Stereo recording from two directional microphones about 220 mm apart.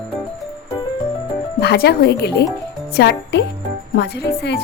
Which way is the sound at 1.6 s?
45° left (ahead or behind).